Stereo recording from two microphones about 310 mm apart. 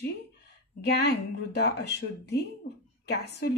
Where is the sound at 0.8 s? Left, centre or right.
Left.